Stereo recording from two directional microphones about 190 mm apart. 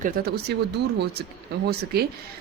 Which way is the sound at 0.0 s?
55° right (ahead or behind).